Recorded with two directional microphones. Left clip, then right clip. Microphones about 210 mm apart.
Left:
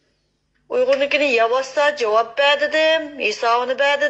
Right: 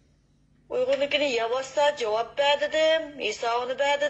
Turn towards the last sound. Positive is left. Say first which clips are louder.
# left 7 dB
turn(degrees=30)  # may be behind; listen again after turning